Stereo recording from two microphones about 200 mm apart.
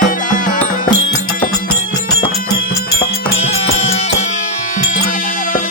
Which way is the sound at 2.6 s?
50° left (ahead or behind).